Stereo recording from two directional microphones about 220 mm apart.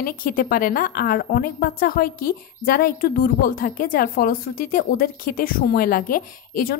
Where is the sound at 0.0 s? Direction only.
40° left (ahead or behind).